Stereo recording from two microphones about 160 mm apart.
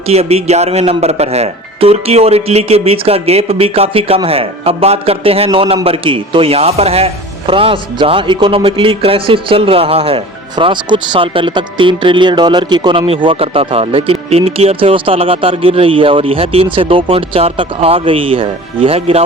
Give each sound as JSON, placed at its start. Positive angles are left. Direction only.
{"t": 0.1, "sound": "speech", "side_deg": -40}